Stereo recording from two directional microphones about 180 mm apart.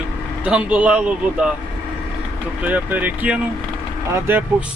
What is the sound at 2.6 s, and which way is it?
Speech, 10° right (ahead or behind).